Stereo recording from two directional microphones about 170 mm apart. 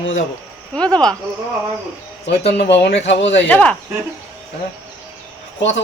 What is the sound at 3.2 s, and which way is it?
Speech, 90° left.